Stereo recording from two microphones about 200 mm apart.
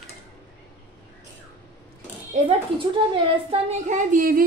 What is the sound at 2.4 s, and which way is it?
A woman's voice, 25° right (ahead or behind).